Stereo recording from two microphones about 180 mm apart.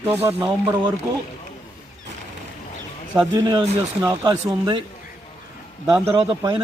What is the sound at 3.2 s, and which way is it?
Speech, 25° right (ahead or behind).